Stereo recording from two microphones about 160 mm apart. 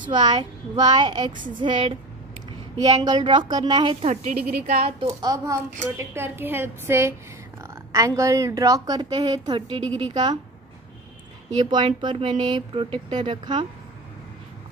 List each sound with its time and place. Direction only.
0.0 s speech: 30° right (ahead or behind)
4.0 s a woman's voice: 45° right (ahead or behind)
5.0 s a woman's voice: 20° right (ahead or behind)
11.6 s speech: 30° right (ahead or behind)